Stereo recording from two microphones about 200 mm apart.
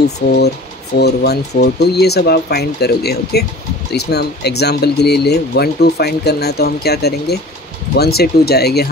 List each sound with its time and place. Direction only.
0.9 s speech: 55° left (ahead or behind)